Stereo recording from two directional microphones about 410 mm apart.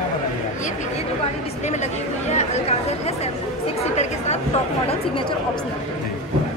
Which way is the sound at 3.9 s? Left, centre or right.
Centre.